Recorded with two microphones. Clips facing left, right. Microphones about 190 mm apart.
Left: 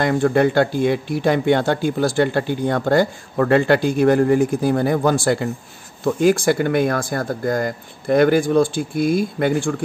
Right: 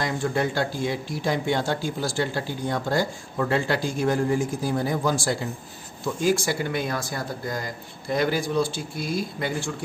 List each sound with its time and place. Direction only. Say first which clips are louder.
0.0 s speech: left 9 dB; 60° left (ahead or behind)